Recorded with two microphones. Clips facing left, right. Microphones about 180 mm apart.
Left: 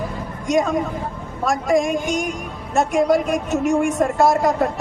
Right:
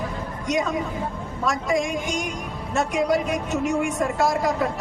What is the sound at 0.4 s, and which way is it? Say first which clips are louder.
Speech: left 6 dB; 50° left (ahead or behind).